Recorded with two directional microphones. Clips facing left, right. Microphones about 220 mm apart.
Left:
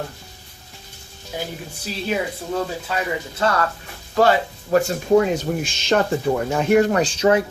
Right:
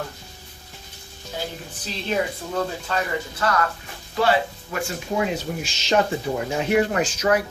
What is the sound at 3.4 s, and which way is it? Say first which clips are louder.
Speech: left 4 dB; 25° left (ahead or behind).